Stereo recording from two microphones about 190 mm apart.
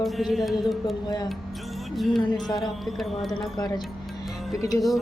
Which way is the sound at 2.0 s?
Centre (ahead or behind).